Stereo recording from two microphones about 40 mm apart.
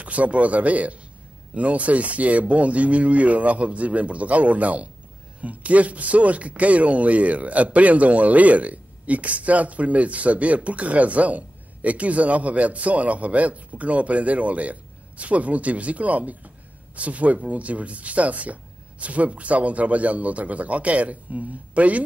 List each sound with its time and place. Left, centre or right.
0.0 s speech: right